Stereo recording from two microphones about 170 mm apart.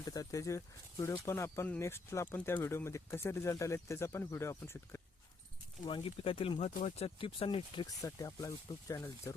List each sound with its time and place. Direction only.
0.0 s speech: 20° left (ahead or behind)
5.8 s speech: 30° left (ahead or behind)
8.0 s speech: 20° left (ahead or behind)